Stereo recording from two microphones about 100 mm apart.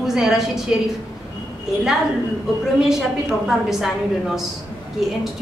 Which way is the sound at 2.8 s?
5° right (ahead or behind).